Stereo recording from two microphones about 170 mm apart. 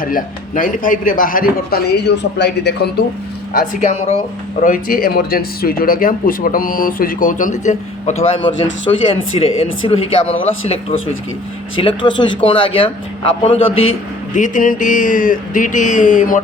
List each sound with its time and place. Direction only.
0.0 s speech: 55° left (ahead or behind); by 2.9 s 75° left (ahead or behind)
3.5 s a sound: 50° left (ahead or behind)
4.6 s speech: 55° left (ahead or behind)
8.9 s speech: 30° left (ahead or behind)
11.8 s speech: 30° left (ahead or behind)
14.3 s a sound: 50° left (ahead or behind)